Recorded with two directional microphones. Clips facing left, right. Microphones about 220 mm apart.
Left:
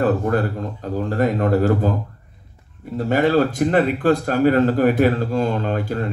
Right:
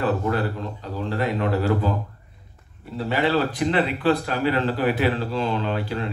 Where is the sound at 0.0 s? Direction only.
50° left (ahead or behind).